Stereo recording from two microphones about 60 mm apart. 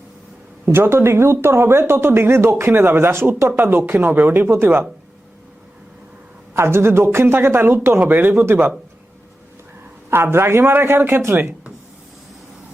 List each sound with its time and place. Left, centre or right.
0.6 s a man's voice: right
6.5 s speech: right
7.9 s speech: right
10.1 s a man's voice: right